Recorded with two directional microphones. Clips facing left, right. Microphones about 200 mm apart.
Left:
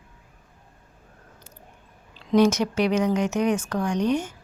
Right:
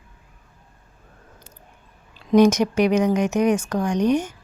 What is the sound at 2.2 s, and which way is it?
A woman's voice, 15° right (ahead or behind).